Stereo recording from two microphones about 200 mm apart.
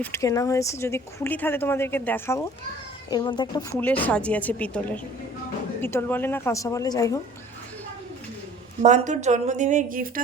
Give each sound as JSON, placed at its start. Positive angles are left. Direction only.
{"t": 0.0, "sound": "speech", "side_deg": 15}
{"t": 3.8, "sound": "speech", "side_deg": 10}
{"t": 8.8, "sound": "speech", "side_deg": -35}